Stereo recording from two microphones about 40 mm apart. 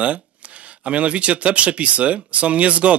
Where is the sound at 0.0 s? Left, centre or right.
Right.